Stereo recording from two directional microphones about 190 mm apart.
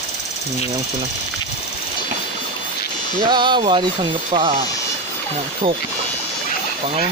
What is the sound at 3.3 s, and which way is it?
Speech, 25° right (ahead or behind).